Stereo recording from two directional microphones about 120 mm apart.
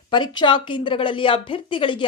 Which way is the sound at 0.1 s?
40° left (ahead or behind).